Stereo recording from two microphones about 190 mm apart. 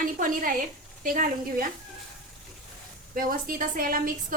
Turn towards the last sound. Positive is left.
turn(degrees=-45)  # may be behind; listen again after turning